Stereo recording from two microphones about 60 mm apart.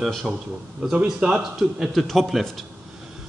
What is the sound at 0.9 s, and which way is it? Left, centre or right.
Speech, centre.